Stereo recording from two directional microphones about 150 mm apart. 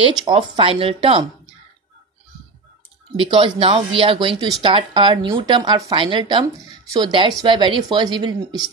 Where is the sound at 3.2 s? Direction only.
35° right (ahead or behind).